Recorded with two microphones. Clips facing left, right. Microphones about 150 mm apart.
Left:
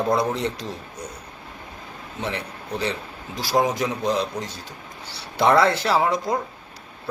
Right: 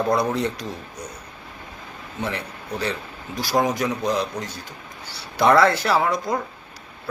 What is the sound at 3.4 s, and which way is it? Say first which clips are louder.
Speech: even; 25° left (ahead or behind).